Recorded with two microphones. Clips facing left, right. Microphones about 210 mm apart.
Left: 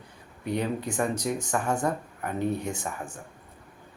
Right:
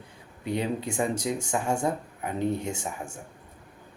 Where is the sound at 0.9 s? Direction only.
30° right (ahead or behind).